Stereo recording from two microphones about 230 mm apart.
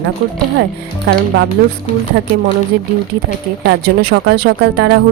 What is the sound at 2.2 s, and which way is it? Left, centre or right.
Speech, right.